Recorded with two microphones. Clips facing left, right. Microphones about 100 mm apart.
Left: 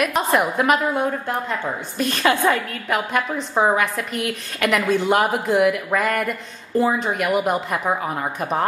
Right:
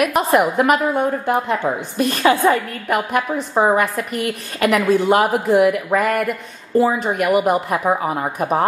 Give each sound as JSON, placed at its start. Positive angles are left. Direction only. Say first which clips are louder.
{"t": 0.0, "sound": "a woman's voice", "louder": "right 4 dB", "side_deg": -5}
{"t": 1.2, "sound": "a woman's voice", "louder": "right 6 dB", "side_deg": -15}
{"t": 2.0, "sound": "a woman's voice", "louder": "right 3 dB", "side_deg": -5}